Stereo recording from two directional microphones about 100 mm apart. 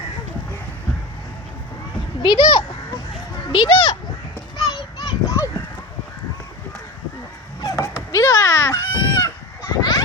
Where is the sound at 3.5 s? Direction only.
55° left (ahead or behind).